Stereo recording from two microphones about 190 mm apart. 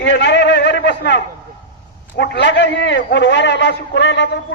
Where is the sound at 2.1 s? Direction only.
65° left (ahead or behind).